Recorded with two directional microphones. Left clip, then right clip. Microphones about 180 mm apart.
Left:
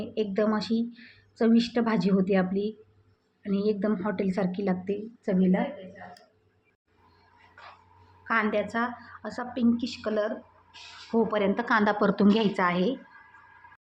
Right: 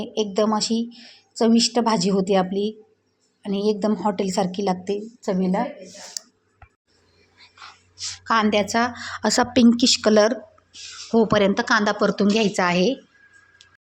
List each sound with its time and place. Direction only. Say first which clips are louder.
0.0 s a woman's voice: right 5 dB; 20° right (ahead or behind)
8.2 s a woman's voice: right 7 dB; 30° right (ahead or behind)
8.7 s speech: right 8 dB; 45° right (ahead or behind)
11.1 s a woman's voice: right 7 dB; 35° right (ahead or behind)
11.8 s a woman's voice: right 4 dB; 15° right (ahead or behind)